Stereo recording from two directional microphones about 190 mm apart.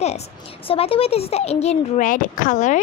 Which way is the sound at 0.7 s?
30° left (ahead or behind).